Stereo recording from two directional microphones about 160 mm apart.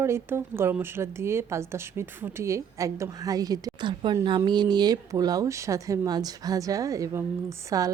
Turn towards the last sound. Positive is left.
turn(degrees=-20)  # may be behind; listen again after turning